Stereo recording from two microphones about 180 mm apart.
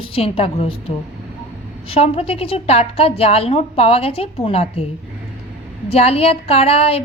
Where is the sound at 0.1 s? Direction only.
30° left (ahead or behind).